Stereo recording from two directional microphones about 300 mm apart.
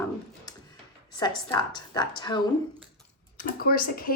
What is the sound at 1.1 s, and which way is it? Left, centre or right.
Speech, centre.